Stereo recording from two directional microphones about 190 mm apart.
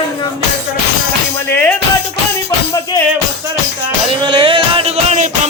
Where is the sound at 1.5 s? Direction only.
10° left (ahead or behind).